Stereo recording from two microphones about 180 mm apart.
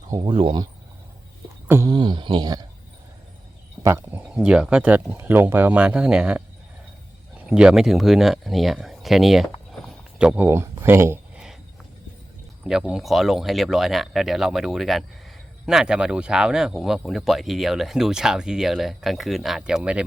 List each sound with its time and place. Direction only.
0.1 s speech: 30° right (ahead or behind)
1.6 s speech: 15° right (ahead or behind)
1.9 s speech: 25° right (ahead or behind)
3.8 s speech: 15° right (ahead or behind)
4.4 s speech: 5° right (ahead or behind)
12.6 s speech: 5° right (ahead or behind)